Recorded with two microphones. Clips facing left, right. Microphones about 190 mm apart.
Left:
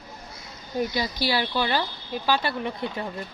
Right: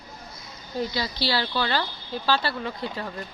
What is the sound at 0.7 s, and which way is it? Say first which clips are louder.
Speech: left 2 dB; 15° left (ahead or behind).